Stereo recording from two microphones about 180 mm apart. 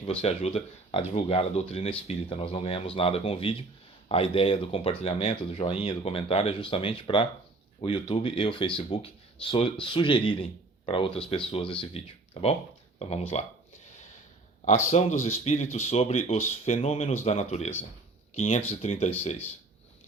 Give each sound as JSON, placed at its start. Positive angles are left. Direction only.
{"t": 0.0, "sound": "speech", "side_deg": 30}
{"t": 14.8, "sound": "speech", "side_deg": 40}